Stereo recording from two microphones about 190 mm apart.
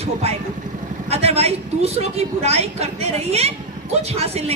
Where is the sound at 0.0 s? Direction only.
35° right (ahead or behind).